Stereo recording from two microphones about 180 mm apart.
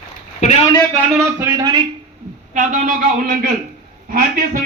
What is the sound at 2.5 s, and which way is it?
A man's voice, 45° right (ahead or behind).